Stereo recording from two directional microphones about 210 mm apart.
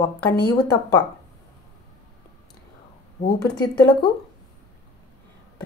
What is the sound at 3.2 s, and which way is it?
Speech, 20° left (ahead or behind).